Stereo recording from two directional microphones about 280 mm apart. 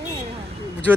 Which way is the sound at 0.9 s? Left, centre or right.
Centre.